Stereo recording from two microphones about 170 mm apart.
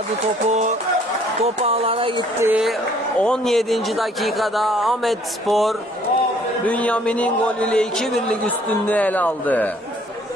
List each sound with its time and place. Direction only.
0.4 s speech: 45° right (ahead or behind)
2.4 s speech: 5° right (ahead or behind)
3.2 s a man's voice: 5° left (ahead or behind)